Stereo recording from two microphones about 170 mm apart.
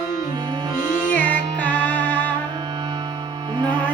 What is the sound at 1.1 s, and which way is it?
Music, 10° left (ahead or behind).